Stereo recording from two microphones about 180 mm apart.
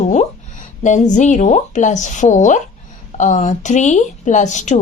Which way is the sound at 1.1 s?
45° left (ahead or behind).